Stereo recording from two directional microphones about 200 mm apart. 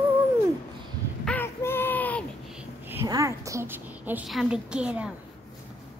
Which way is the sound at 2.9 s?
15° right (ahead or behind).